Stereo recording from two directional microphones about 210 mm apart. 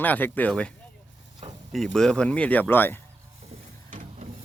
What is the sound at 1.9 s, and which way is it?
Speech, 5° left (ahead or behind).